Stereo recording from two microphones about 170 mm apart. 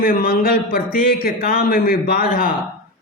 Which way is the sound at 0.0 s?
60° left (ahead or behind).